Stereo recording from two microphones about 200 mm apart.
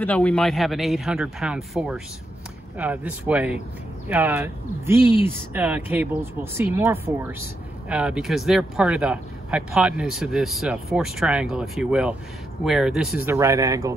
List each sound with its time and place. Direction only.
0.0 s speech: 5° left (ahead or behind); by 13.9 s 15° right (ahead or behind)